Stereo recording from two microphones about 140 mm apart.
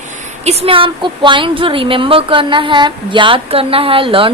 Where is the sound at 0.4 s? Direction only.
40° right (ahead or behind).